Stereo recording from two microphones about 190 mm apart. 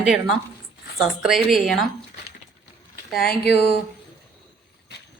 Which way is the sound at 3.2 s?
55° left (ahead or behind).